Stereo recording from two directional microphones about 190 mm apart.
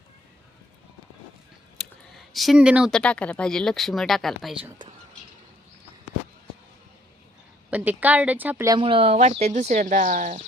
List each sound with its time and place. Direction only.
2.1 s speech: centre (ahead or behind)
7.7 s a woman's voice: 10° right (ahead or behind)
8.8 s speech: 30° right (ahead or behind)